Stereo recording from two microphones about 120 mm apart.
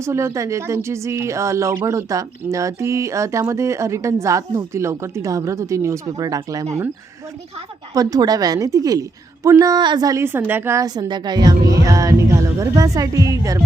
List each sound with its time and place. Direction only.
0.0 s speech: 25° right (ahead or behind)
7.9 s a woman's voice: 30° right (ahead or behind)
10.2 s speech: 20° right (ahead or behind)
11.1 s speech: 35° right (ahead or behind)